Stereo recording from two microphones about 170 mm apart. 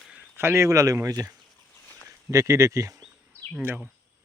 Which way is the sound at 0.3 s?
15° right (ahead or behind).